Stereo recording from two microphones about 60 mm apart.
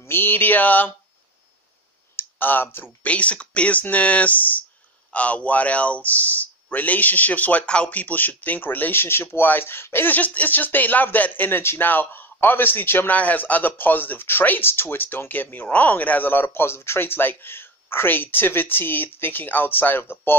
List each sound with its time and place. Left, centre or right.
0.0 s speech: left
2.1 s speech: left
3.1 s speech: left